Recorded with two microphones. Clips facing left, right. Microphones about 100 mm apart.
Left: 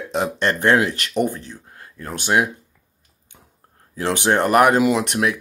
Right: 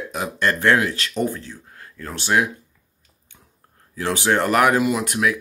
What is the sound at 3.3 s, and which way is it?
Whispering, 40° left (ahead or behind).